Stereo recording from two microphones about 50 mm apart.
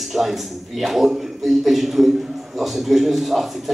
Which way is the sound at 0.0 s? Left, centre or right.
Centre.